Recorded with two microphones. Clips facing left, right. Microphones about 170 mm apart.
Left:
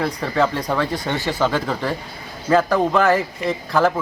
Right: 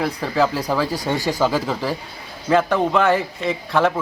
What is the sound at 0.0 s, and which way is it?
A man's voice, 5° right (ahead or behind).